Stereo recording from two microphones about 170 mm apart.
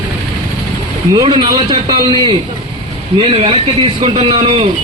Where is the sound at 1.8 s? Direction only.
30° right (ahead or behind).